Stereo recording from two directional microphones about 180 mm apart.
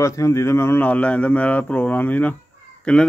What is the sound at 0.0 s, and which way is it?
A man's voice, 15° left (ahead or behind).